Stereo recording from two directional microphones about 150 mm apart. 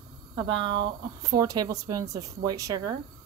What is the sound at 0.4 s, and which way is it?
Speech, 35° right (ahead or behind).